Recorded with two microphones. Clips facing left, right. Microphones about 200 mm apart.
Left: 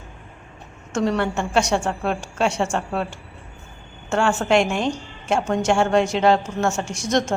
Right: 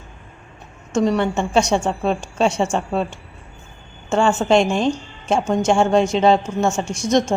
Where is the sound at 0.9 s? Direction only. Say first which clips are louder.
Right 3 dB; 15° right (ahead or behind).